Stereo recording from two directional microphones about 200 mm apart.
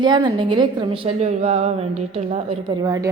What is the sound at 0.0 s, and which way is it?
A woman's voice, 20° right (ahead or behind).